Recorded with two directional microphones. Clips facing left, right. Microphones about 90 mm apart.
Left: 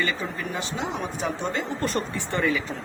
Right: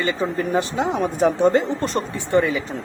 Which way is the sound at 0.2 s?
40° right (ahead or behind).